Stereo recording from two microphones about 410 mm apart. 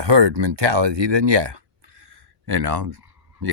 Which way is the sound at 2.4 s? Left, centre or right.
Right.